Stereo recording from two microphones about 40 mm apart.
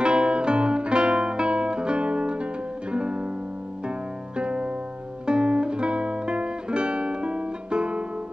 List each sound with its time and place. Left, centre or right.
0.0 s guitar: right
2.9 s music: right
4.4 s music: right